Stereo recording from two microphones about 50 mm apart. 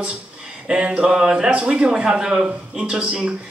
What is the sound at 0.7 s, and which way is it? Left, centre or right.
Speech, centre.